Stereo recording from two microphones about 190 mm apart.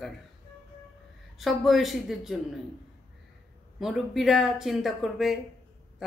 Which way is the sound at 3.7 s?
Centre (ahead or behind).